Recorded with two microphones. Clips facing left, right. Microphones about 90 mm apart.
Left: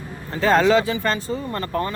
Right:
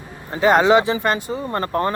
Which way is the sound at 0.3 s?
15° right (ahead or behind).